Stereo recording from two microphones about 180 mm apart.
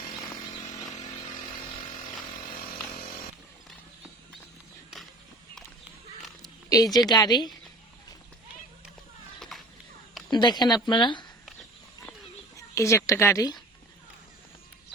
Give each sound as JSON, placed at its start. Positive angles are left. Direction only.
{"t": 6.4, "sound": "a woman's voice", "side_deg": 20}
{"t": 9.5, "sound": "a sound", "side_deg": 0}
{"t": 10.2, "sound": "speech", "side_deg": 25}
{"t": 12.5, "sound": "a woman's voice", "side_deg": 15}